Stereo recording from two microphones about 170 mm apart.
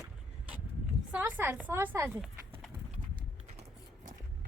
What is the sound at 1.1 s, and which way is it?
A woman's voice, 10° right (ahead or behind).